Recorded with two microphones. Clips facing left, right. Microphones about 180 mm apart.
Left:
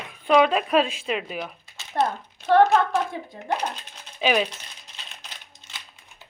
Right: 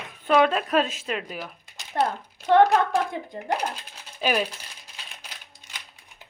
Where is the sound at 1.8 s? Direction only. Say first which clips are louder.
Left 1 dB; 10° right (ahead or behind).